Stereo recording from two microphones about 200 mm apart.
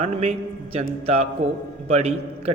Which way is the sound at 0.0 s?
30° right (ahead or behind).